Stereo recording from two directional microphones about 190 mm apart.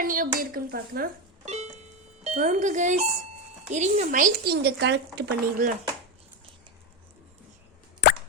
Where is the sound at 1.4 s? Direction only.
35° right (ahead or behind).